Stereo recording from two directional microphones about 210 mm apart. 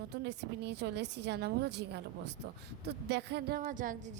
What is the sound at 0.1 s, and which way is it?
A woman's voice, 55° right (ahead or behind).